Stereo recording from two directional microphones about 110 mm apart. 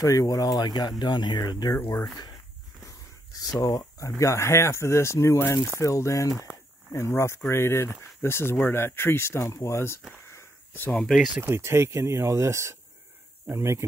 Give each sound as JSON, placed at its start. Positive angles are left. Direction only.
{"t": 0.0, "sound": "speech", "side_deg": 30}
{"t": 2.9, "sound": "a sound", "side_deg": 35}
{"t": 3.6, "sound": "speech", "side_deg": 35}
{"t": 10.9, "sound": "speech", "side_deg": 5}
{"t": 11.4, "sound": "speech", "side_deg": -20}